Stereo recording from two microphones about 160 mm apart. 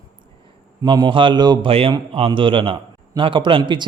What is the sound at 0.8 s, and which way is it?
A man's voice, 30° right (ahead or behind).